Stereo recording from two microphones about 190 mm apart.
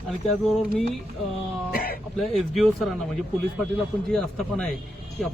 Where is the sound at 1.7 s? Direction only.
50° left (ahead or behind).